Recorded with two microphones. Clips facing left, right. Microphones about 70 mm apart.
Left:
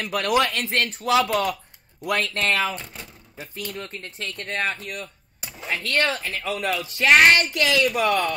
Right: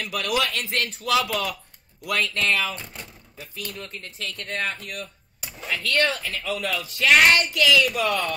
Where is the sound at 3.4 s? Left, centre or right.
Left.